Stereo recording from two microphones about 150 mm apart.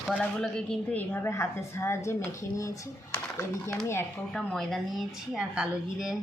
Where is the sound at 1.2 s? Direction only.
20° left (ahead or behind).